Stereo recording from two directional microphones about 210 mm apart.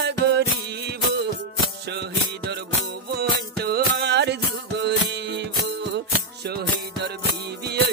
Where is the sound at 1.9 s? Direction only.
50° right (ahead or behind).